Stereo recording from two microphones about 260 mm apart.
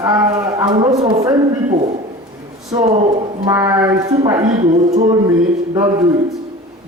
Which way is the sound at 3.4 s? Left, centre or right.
Centre.